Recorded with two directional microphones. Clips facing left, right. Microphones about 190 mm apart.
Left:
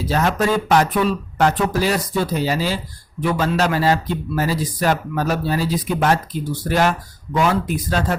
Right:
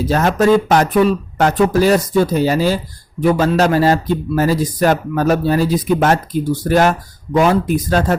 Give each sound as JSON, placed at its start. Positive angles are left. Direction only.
{"t": 0.1, "sound": "speech", "side_deg": -45}